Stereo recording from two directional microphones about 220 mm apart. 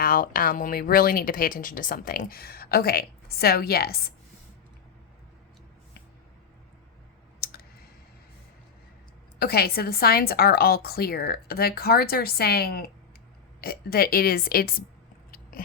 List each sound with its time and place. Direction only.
0.0 s speech: 40° left (ahead or behind)
7.4 s clicking: 45° left (ahead or behind)
9.4 s a woman's voice: 45° left (ahead or behind)
15.3 s biting: 40° left (ahead or behind)